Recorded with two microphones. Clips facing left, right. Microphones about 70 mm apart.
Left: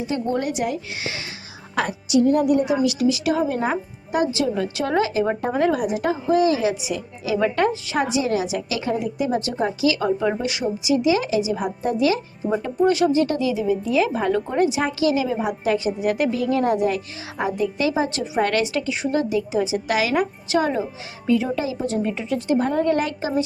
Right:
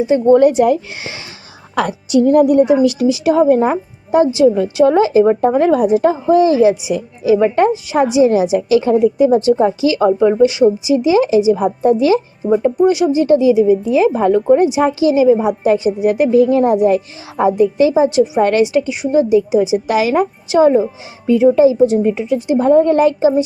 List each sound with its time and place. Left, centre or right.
0.3 s a woman's voice: right
2.2 s a woman's voice: right
3.1 s a woman's voice: right
4.3 s a woman's voice: centre
12.7 s a woman's voice: centre; by 14.3 s right
14.3 s a woman's voice: centre
19.9 s a woman's voice: right
21.8 s a woman's voice: centre
22.6 s a woman's voice: right